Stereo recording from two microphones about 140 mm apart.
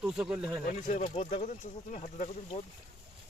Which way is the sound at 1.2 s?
60° left (ahead or behind).